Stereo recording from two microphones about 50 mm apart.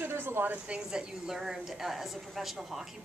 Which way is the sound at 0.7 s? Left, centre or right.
Centre.